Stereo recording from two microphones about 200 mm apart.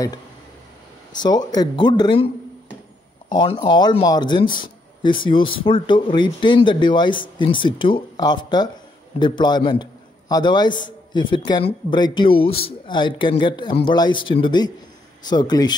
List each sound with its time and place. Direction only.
1.5 s speech: 20° left (ahead or behind)
3.3 s speech: 20° left (ahead or behind)